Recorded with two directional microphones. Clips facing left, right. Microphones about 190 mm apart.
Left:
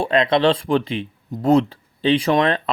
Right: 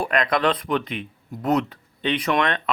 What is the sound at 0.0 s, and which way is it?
Speech, 25° left (ahead or behind).